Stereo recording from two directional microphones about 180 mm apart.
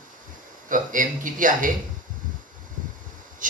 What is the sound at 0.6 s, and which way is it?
Speech, 45° right (ahead or behind).